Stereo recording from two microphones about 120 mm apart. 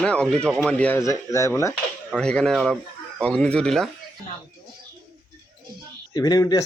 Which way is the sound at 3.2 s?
10° left (ahead or behind).